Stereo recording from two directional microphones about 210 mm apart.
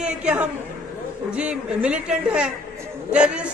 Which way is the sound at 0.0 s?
5° right (ahead or behind).